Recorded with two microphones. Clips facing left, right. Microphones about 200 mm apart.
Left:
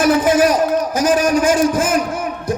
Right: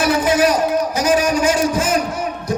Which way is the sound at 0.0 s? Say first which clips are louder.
Left 2 dB; 50° left (ahead or behind).